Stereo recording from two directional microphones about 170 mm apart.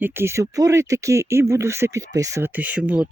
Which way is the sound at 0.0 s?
15° right (ahead or behind).